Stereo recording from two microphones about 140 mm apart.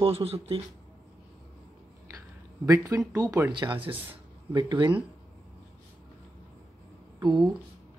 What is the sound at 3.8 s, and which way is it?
Speech, 40° right (ahead or behind).